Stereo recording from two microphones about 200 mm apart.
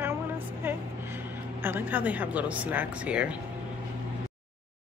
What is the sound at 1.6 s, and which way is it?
Speech, 10° right (ahead or behind).